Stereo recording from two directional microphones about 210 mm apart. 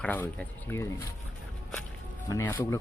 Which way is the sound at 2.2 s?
15° left (ahead or behind).